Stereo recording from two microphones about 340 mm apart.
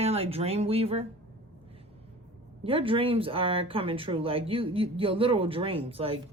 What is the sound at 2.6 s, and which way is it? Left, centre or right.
Speech, centre.